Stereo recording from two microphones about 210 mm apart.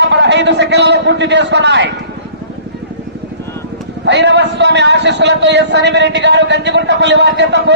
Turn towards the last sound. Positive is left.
turn(degrees=-55)  # may be behind; listen again after turning